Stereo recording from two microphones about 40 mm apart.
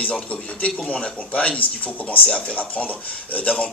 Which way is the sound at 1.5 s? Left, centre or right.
Left.